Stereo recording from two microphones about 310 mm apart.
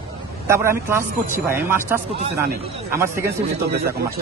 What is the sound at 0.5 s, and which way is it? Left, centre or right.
A man's voice, centre.